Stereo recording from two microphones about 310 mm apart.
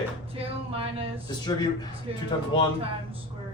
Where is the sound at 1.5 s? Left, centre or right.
Centre.